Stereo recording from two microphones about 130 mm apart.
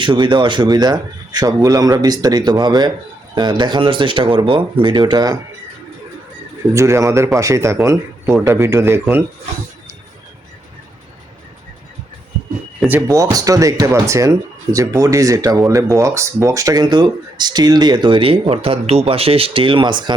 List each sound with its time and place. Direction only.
0.0 s speech: 40° right (ahead or behind)
6.7 s speech: 20° right (ahead or behind)
12.9 s speech: 25° right (ahead or behind)